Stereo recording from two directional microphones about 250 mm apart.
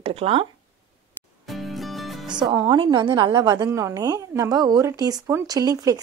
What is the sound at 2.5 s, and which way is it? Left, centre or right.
A woman's voice, centre.